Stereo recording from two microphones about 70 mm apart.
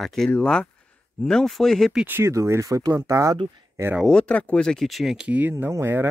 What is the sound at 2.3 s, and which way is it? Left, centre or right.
Speech, right.